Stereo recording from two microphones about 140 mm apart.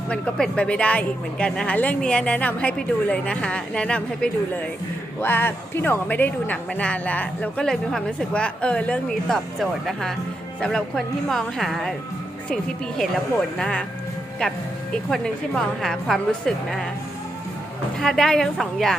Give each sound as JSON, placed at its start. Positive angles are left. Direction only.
{"t": 0.1, "sound": "a woman's voice", "side_deg": 5}
{"t": 13.6, "sound": "a woman's voice", "side_deg": 5}
{"t": 15.1, "sound": "a woman's voice", "side_deg": 5}
{"t": 18.0, "sound": "a woman's voice", "side_deg": 5}